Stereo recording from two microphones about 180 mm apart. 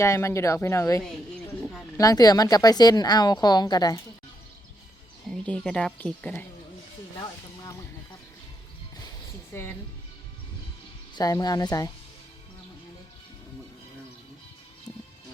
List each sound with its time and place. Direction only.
0.0 s a woman's voice: 15° left (ahead or behind)
5.3 s speech: 5° left (ahead or behind)
9.5 s speech: 10° left (ahead or behind)
11.1 s a woman's voice: 20° left (ahead or behind)